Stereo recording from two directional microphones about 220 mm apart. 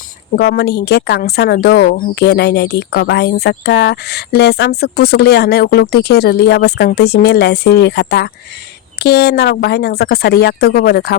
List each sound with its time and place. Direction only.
0.3 s speech: 50° left (ahead or behind)